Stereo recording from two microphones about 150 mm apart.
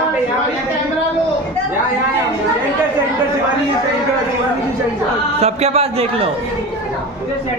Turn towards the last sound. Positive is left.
turn(degrees=-40)  # may be behind; listen again after turning